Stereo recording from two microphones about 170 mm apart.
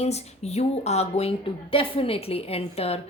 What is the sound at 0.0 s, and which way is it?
Speech, 40° left (ahead or behind).